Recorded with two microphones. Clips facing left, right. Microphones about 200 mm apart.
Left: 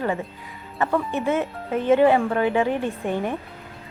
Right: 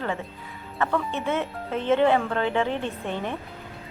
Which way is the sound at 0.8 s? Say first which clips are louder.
Left 3 dB; 15° left (ahead or behind).